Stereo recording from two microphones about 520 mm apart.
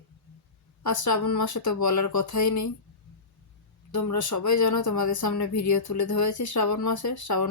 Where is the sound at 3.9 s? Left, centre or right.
Left.